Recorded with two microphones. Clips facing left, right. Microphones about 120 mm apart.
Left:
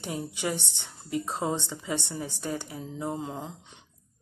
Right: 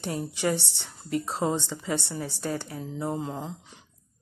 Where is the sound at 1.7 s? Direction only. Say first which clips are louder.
Right 2 dB; 20° left (ahead or behind).